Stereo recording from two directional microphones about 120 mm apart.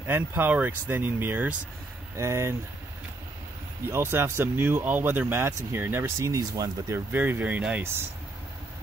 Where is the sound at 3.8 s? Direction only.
20° right (ahead or behind).